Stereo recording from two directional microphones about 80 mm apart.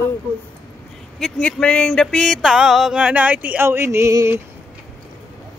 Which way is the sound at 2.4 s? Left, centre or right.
Centre.